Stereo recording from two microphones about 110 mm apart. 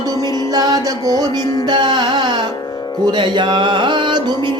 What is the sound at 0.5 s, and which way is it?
Music, 35° right (ahead or behind).